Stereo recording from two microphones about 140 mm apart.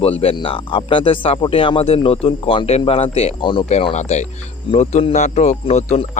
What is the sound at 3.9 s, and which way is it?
Speech, 55° left (ahead or behind).